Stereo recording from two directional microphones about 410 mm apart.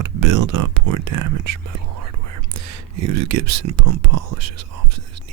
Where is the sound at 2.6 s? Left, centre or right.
Right.